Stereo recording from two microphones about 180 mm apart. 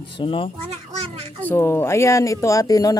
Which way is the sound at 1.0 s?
35° right (ahead or behind).